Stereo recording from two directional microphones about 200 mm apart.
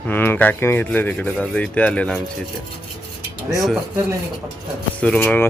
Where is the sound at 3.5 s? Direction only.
Centre (ahead or behind).